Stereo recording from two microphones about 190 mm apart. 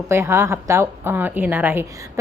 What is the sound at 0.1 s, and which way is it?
A woman's voice, 15° right (ahead or behind).